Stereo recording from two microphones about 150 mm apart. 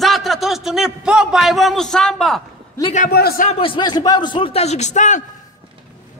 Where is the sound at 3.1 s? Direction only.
90° left.